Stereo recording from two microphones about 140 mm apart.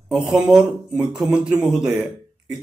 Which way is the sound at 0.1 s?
Centre (ahead or behind).